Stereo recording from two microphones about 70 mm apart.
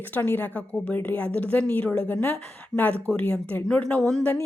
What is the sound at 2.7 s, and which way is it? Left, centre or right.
Speech, centre.